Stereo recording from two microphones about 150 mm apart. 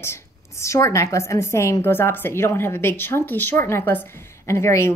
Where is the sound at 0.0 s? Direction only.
20° left (ahead or behind).